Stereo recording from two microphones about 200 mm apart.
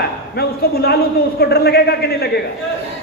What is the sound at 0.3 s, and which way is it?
A man's voice, 50° left (ahead or behind).